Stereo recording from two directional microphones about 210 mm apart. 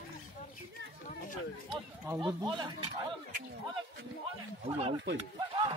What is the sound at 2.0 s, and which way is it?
Speech, 15° right (ahead or behind).